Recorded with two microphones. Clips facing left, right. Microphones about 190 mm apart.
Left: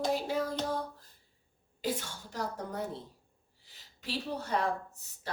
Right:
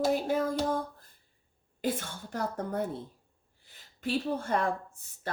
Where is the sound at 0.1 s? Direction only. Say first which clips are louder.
Right 4 dB; 50° right (ahead or behind).